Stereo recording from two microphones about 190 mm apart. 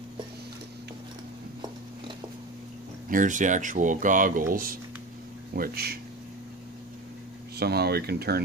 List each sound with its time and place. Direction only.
3.1 s speech: 45° right (ahead or behind)
5.5 s speech: 55° right (ahead or behind)
7.5 s speech: 55° right (ahead or behind)